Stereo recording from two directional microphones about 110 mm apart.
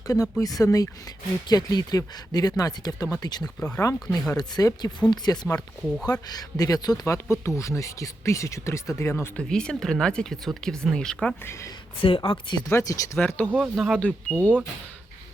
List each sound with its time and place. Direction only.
0.1 s speech: 30° left (ahead or behind)
3.4 s speech: 10° left (ahead or behind)
4.4 s speech: 35° left (ahead or behind)
5.5 s speech: 5° left (ahead or behind)
6.1 s speech: 35° left (ahead or behind)
9.3 s speech: 10° left (ahead or behind)
11.9 s speech: 55° left (ahead or behind)
12.6 s speech: 25° left (ahead or behind)
13.1 s speech: 15° left (ahead or behind)
13.7 s speech: 5° right (ahead or behind)
14.0 s speech: 15° left (ahead or behind)